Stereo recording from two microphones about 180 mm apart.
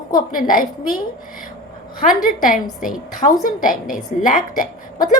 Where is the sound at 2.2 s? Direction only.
50° left (ahead or behind).